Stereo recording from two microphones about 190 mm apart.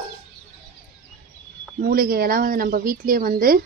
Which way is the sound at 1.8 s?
50° right (ahead or behind).